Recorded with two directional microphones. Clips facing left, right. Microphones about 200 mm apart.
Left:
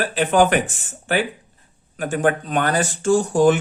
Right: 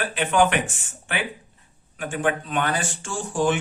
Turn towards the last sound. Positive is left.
turn(degrees=40)  # may be behind; listen again after turning